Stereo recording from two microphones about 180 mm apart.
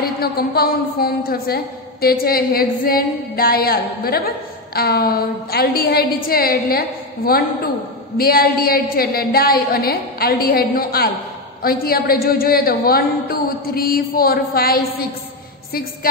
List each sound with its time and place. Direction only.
0.0 s a woman's voice: 55° left (ahead or behind)